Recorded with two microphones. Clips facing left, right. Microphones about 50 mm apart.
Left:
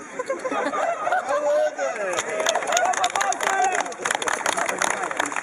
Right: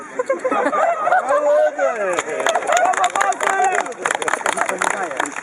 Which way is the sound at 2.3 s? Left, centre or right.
Centre.